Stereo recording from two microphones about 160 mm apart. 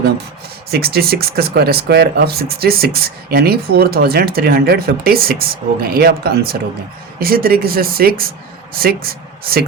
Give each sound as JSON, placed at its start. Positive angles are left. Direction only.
{"t": 0.7, "sound": "speech", "side_deg": -75}